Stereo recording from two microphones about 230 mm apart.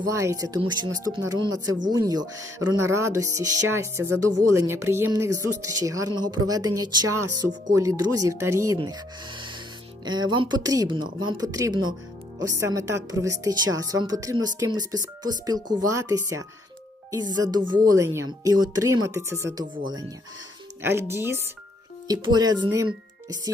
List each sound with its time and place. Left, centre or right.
0.1 s speech: centre